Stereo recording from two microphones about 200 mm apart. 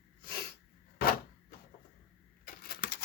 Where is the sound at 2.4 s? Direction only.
50° left (ahead or behind).